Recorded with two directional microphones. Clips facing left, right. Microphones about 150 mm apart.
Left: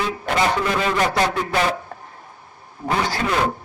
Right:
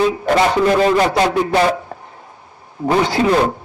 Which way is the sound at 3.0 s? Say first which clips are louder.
Right 7 dB; 20° right (ahead or behind).